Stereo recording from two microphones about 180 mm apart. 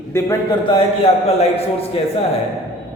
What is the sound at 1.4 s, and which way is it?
Speech, 35° left (ahead or behind).